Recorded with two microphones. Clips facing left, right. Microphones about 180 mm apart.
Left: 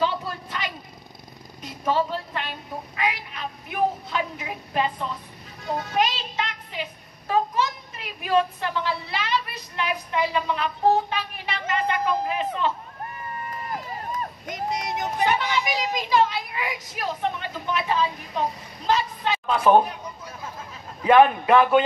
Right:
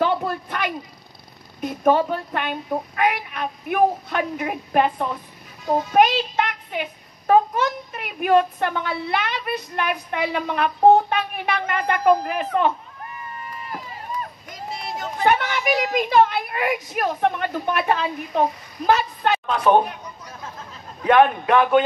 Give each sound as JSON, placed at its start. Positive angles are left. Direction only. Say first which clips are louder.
{"t": 0.0, "sound": "a sound", "louder": "right 5 dB", "side_deg": -55}
{"t": 1.6, "sound": "a child's voice", "louder": "right 6 dB", "side_deg": -55}
{"t": 14.5, "sound": "a sound", "louder": "left 5 dB", "side_deg": 20}
{"t": 15.2, "sound": "a child's voice", "louder": "right 5 dB", "side_deg": -60}
{"t": 19.4, "sound": "speech", "louder": "left 1 dB", "side_deg": 5}
{"t": 21.0, "sound": "speech", "louder": "even", "side_deg": 0}